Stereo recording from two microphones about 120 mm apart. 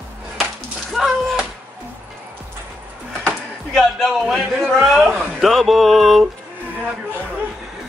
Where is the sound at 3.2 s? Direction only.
5° left (ahead or behind).